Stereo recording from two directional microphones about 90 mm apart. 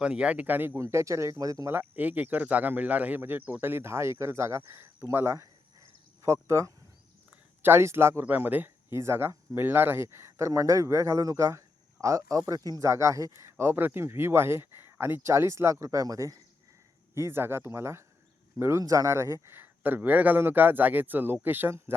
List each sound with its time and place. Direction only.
0.0 s speech: 10° right (ahead or behind); by 1.7 s 40° right (ahead or behind)
1.7 s speech: 20° right (ahead or behind)
13.7 s speech: 25° right (ahead or behind); by 16.4 s 40° right (ahead or behind)
17.2 s speech: 25° right (ahead or behind)